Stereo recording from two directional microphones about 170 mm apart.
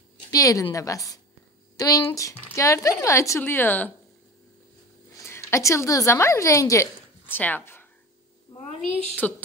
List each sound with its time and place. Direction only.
0.3 s a woman's voice: 20° left (ahead or behind)
5.1 s a woman's voice: 15° left (ahead or behind)
9.2 s speech: 10° left (ahead or behind)